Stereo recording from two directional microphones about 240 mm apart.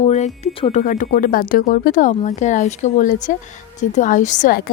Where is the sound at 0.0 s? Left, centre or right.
Left.